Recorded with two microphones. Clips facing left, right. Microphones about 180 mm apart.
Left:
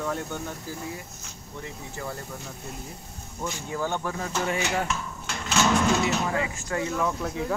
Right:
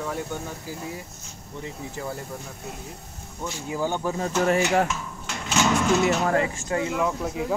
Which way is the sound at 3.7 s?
15° right (ahead or behind).